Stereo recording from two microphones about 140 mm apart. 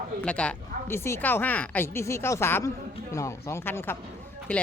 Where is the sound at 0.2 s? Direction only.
10° left (ahead or behind).